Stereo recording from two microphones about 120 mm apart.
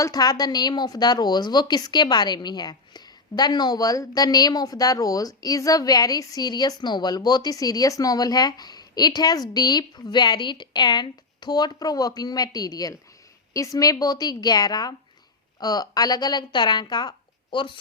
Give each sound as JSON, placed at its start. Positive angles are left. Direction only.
{"t": 0.0, "sound": "a woman's voice", "side_deg": 35}